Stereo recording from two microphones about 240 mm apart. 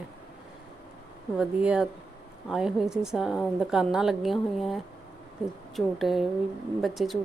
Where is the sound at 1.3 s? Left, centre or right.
Centre.